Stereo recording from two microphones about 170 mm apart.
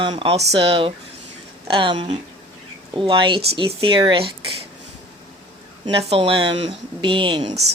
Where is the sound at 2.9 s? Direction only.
30° right (ahead or behind).